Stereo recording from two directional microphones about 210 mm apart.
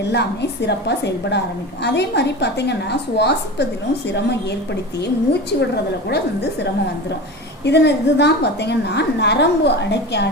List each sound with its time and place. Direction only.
0.0 s a woman's voice: 55° left (ahead or behind)
5.5 s a woman's voice: 55° left (ahead or behind)